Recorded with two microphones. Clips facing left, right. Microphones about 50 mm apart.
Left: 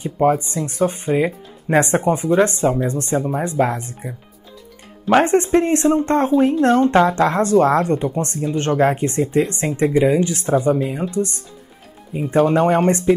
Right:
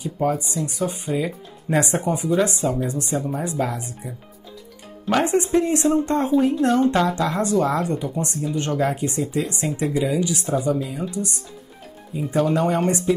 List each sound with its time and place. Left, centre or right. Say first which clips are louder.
0.0 s speech: left 6 dB; left
0.7 s speech: left 8 dB; left
5.2 s speech: left 4 dB; left